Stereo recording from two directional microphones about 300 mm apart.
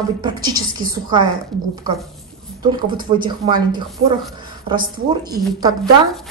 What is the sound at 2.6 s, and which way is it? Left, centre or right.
A woman's voice, centre.